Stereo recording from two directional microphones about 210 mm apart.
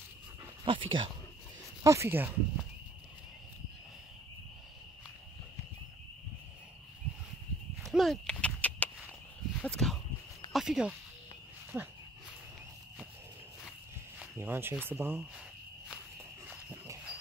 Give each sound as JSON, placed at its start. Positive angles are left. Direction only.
{"t": 0.7, "sound": "speech", "side_deg": -25}
{"t": 1.8, "sound": "speech", "side_deg": -15}
{"t": 7.8, "sound": "a sound", "side_deg": 0}
{"t": 10.5, "sound": "speech", "side_deg": 0}
{"t": 14.2, "sound": "speech", "side_deg": -10}
{"t": 16.4, "sound": "a sound", "side_deg": -10}